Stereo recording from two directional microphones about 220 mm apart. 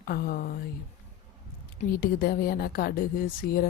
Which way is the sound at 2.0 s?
45° left (ahead or behind).